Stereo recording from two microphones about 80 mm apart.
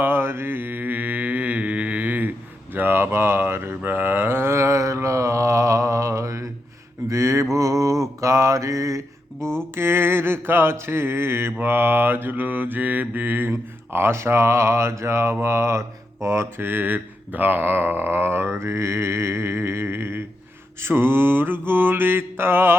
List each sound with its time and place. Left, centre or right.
0.0 s mantra: right
9.7 s mantra: right